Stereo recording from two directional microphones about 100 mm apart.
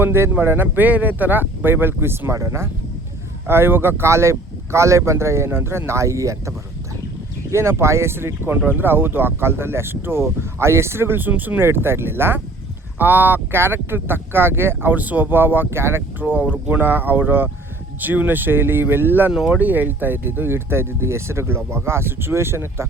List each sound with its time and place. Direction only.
0.0 s speech: 25° right (ahead or behind)
7.5 s speech: 25° right (ahead or behind)
19.3 s speech: 10° right (ahead or behind); by 22.9 s 25° right (ahead or behind)